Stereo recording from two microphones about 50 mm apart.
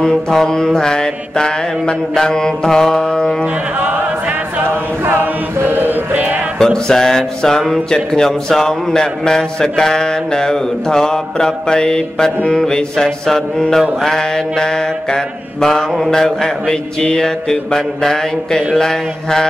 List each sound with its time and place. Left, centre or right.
0.0 s a man's voice: centre
5.0 s chant: right
6.1 s music: right
6.6 s a man's voice: centre